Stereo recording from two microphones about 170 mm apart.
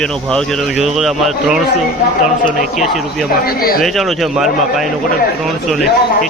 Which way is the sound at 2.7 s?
Centre (ahead or behind).